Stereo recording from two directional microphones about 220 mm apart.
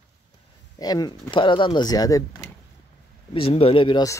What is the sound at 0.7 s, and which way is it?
Speech, 20° left (ahead or behind).